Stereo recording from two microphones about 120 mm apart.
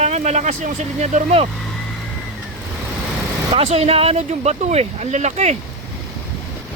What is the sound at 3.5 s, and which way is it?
Speech, 60° right (ahead or behind).